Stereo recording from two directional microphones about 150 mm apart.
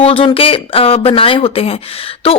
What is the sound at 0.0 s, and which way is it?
Speech, 40° left (ahead or behind).